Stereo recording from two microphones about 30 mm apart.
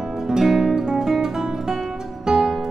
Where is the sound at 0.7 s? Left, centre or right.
Centre.